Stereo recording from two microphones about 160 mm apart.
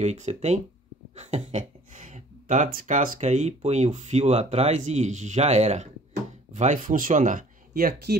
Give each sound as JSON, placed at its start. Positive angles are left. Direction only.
{"t": 0.0, "sound": "speech", "side_deg": -45}